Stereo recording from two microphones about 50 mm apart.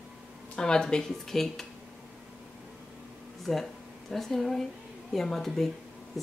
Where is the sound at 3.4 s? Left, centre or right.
Centre.